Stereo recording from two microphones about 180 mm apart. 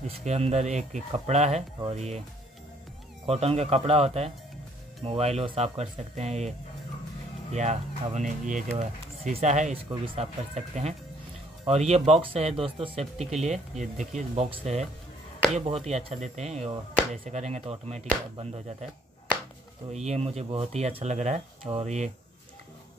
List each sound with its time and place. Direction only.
0.2 s speech: 35° right (ahead or behind)
3.3 s speech: 35° right (ahead or behind)
7.5 s speech: 40° right (ahead or behind)
19.9 s speech: 40° right (ahead or behind)